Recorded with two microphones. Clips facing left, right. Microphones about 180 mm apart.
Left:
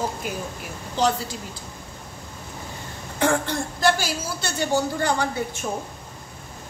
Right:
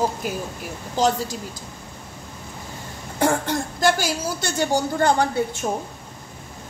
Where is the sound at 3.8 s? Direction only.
45° right (ahead or behind).